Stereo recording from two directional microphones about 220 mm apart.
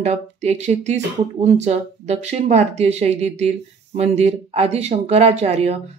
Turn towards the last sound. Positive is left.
turn(degrees=-30)  # may be behind; listen again after turning